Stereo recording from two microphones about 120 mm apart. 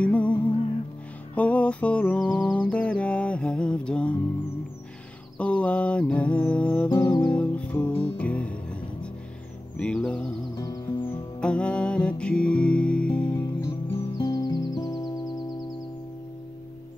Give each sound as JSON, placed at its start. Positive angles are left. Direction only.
{"t": 0.0, "sound": "music", "side_deg": 10}
{"t": 5.4, "sound": "music", "side_deg": 10}
{"t": 10.5, "sound": "music", "side_deg": 30}
{"t": 11.3, "sound": "music", "side_deg": 10}
{"t": 14.1, "sound": "music", "side_deg": 35}